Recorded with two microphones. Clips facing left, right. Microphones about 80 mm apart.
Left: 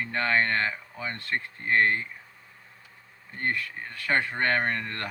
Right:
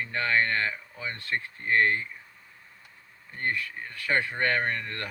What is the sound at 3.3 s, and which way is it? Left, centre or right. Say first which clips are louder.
Speech: left 1 dB; left.